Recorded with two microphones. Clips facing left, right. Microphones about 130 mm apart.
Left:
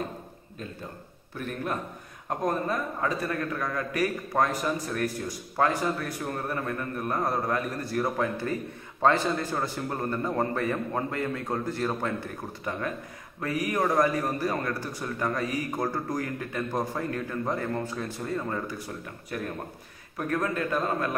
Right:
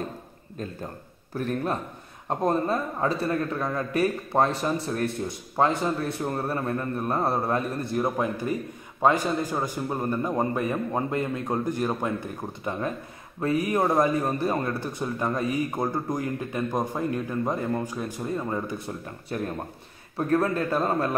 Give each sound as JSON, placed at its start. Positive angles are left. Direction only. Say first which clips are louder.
{"t": 1.3, "sound": "a man's voice", "louder": "right 4 dB", "side_deg": -35}
{"t": 13.4, "sound": "a man's voice", "louder": "right 4 dB", "side_deg": -25}